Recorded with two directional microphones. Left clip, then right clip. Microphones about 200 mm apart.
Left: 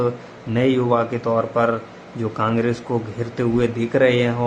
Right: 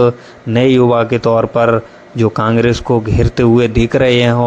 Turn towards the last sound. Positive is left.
turn(degrees=-35)  # may be behind; listen again after turning